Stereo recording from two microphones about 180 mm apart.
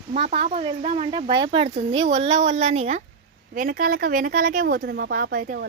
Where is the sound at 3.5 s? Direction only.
55° right (ahead or behind).